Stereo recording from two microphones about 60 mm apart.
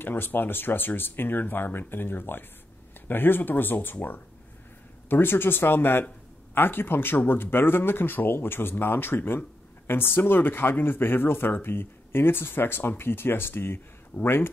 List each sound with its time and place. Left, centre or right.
0.0 s speech: left